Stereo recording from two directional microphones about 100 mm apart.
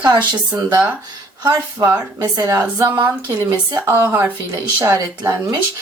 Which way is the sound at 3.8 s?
20° right (ahead or behind).